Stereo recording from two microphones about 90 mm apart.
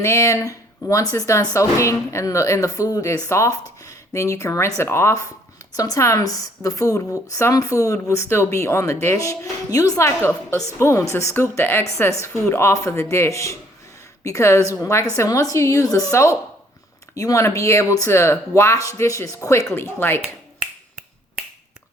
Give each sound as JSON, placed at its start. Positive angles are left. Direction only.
{"t": 0.0, "sound": "speech", "side_deg": 35}
{"t": 10.1, "sound": "a woman's voice", "side_deg": 30}
{"t": 19.7, "sound": "a woman's voice", "side_deg": 25}